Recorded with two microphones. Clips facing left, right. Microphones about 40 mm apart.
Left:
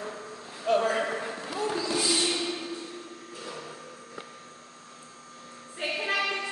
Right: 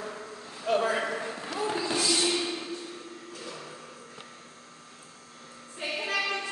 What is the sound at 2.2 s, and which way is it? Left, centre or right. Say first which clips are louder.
Music: right 1 dB; centre.